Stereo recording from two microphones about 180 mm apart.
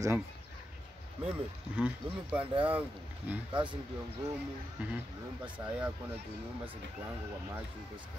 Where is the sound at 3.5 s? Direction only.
25° right (ahead or behind).